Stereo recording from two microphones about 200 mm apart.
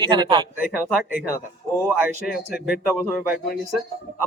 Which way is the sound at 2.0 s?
Centre (ahead or behind).